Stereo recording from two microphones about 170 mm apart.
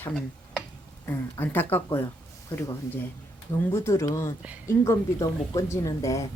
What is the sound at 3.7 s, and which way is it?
A woman's voice, 15° left (ahead or behind).